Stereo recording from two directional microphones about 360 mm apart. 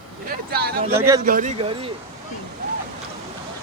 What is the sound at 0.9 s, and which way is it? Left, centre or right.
Speech, centre.